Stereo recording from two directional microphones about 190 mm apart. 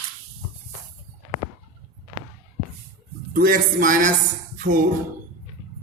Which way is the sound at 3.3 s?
45° right (ahead or behind).